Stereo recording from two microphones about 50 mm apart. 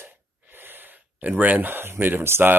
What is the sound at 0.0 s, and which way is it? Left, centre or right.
Speech, right.